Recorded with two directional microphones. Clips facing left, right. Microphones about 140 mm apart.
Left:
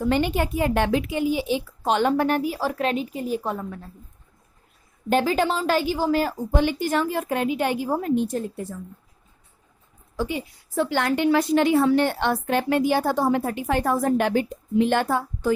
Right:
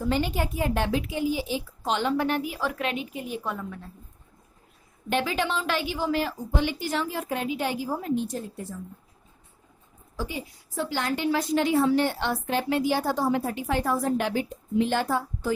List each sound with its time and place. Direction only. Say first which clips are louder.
0.1 s a woman's voice: left 4 dB; 65° left (ahead or behind); by 3.8 s 35° left (ahead or behind)
5.0 s a woman's voice: left 6 dB; 40° left (ahead or behind); by 8.6 s 60° left (ahead or behind)
10.8 s a woman's voice: left 6 dB; 65° left (ahead or behind)